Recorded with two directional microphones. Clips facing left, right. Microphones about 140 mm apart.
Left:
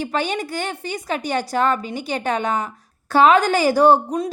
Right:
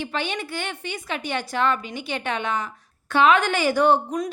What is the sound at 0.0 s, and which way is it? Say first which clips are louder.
A woman's voice: left 5 dB; 40° left (ahead or behind).